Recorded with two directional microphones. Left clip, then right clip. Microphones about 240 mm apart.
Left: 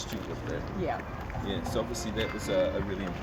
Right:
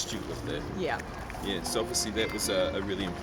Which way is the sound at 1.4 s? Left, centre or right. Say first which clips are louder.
Right 2 dB; right.